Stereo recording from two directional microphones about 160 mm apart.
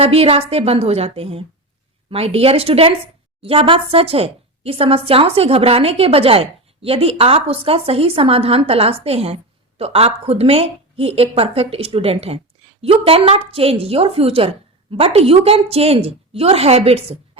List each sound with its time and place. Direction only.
0.0 s a woman's voice: 40° right (ahead or behind)